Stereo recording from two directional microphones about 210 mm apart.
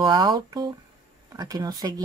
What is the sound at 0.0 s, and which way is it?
Speech, 20° right (ahead or behind).